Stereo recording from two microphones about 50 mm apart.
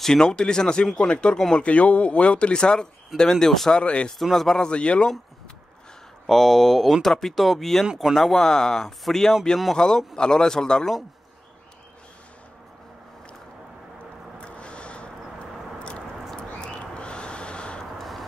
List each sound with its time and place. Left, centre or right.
0.0 s speech: centre
3.8 s speech: left
4.2 s speech: centre
4.6 s speech: left
6.2 s speech: centre
8.1 s speech: centre
14.4 s a sound: left
17.9 s vehicle: centre